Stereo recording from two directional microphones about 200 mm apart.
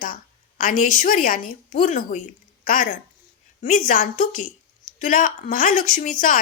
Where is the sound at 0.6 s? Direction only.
40° left (ahead or behind).